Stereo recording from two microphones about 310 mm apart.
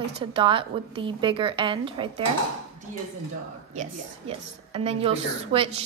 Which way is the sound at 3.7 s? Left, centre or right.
Centre.